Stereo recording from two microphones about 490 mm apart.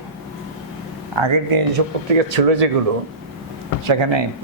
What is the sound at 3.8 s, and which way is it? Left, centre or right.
Speech, right.